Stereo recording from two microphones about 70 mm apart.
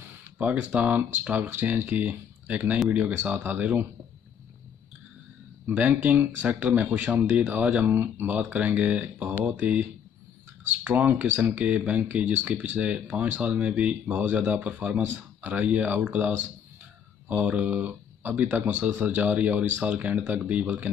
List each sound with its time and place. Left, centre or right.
0.4 s speech: right
5.7 s speech: right
11.5 s speech: centre